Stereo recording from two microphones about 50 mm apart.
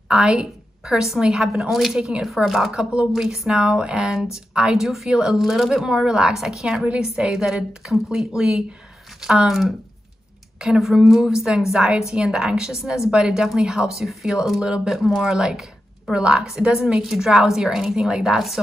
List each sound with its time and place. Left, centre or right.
0.1 s a woman's voice: centre
3.1 s a woman's voice: centre
4.7 s a woman's voice: centre